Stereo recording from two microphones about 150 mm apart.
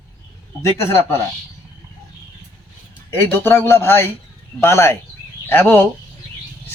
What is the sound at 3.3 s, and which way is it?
Speech, 15° left (ahead or behind).